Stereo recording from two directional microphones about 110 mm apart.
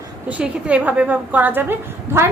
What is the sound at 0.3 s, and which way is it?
A woman's voice, 10° right (ahead or behind).